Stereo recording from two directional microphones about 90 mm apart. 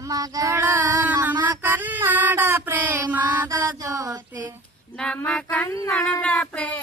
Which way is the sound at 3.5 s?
40° right (ahead or behind).